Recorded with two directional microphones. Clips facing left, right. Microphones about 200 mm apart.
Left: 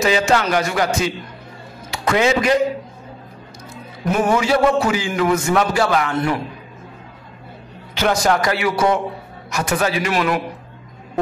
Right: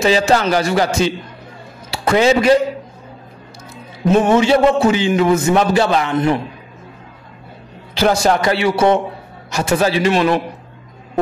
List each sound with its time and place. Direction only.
0.0 s a man's voice: 30° right (ahead or behind)
4.1 s a man's voice: 25° right (ahead or behind)
7.9 s a man's voice: 30° right (ahead or behind)